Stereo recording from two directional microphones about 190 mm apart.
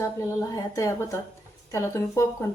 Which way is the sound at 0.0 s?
15° left (ahead or behind).